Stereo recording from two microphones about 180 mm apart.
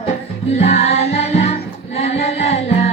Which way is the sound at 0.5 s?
35° left (ahead or behind).